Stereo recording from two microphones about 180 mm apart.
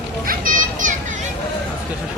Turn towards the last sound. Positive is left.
turn(degrees=-45)  # may be behind; listen again after turning